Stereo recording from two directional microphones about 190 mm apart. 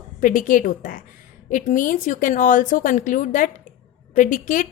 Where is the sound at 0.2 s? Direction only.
45° left (ahead or behind).